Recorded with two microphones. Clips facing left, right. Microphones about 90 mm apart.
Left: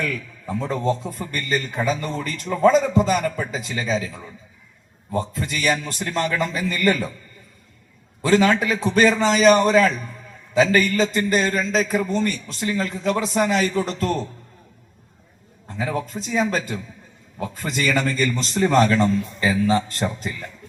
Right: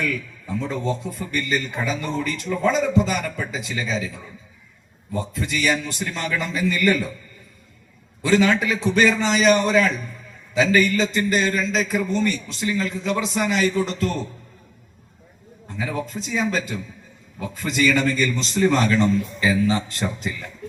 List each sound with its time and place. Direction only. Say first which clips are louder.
0.0 s a man's voice: right 1 dB; 40° left (ahead or behind)
5.1 s a man's voice: left 1 dB; 40° left (ahead or behind)
8.2 s a man's voice: left 1 dB; 40° left (ahead or behind)
15.8 s a man's voice: left 2 dB; 40° left (ahead or behind)